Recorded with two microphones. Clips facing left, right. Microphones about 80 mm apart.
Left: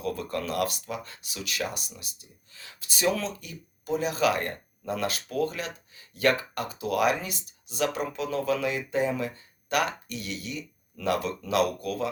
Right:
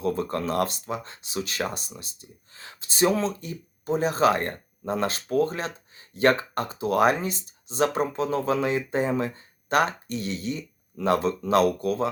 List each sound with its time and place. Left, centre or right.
0.0 s speech: right